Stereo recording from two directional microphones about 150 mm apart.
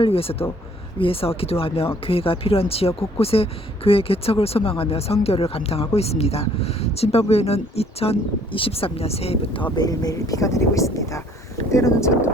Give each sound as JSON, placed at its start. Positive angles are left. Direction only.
{"t": 0.0, "sound": "speech", "side_deg": 40}
{"t": 9.7, "sound": "speech", "side_deg": 25}